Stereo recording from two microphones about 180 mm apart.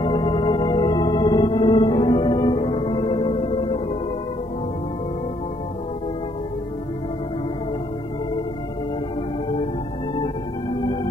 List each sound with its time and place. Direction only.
0.0 s music: 25° left (ahead or behind)
3.2 s music: 35° left (ahead or behind)